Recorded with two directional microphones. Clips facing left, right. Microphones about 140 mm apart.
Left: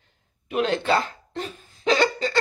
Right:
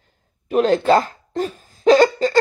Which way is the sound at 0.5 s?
40° right (ahead or behind).